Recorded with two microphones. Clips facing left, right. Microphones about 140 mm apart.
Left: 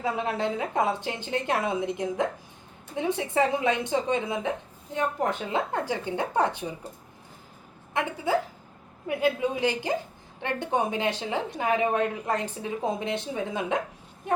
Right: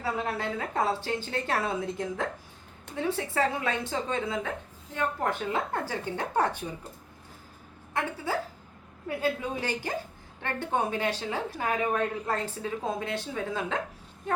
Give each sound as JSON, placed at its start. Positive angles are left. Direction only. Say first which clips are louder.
{"t": 0.0, "sound": "speech", "louder": "left 3 dB", "side_deg": 20}
{"t": 9.0, "sound": "a woman's voice", "louder": "left 4 dB", "side_deg": 15}